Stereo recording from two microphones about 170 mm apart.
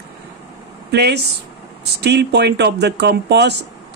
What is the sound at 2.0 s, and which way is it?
Speech, 80° right.